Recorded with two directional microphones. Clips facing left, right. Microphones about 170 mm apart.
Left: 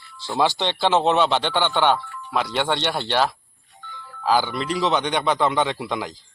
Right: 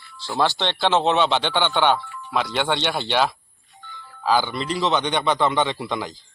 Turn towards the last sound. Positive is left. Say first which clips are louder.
# even
turn(degrees=5)  # may be behind; listen again after turning